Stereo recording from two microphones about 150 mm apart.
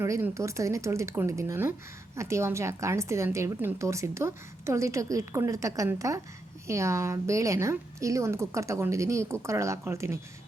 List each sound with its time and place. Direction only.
0.0 s a woman's voice: 20° right (ahead or behind)